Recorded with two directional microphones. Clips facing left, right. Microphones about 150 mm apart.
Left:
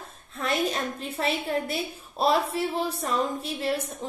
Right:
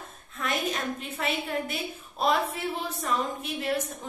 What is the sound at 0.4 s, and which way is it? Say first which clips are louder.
A woman's voice: left 3 dB; 35° left (ahead or behind).